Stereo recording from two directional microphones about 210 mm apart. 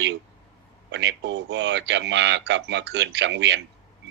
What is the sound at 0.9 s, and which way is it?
A man's voice, 55° right (ahead or behind).